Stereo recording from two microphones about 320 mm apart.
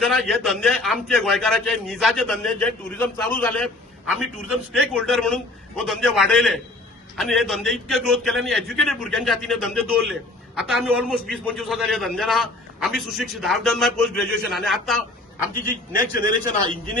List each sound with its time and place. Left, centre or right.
0.0 s a man's voice: centre
15.7 s a man's voice: left